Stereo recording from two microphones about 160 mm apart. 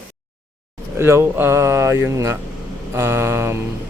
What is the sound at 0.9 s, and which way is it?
Speech, 15° right (ahead or behind).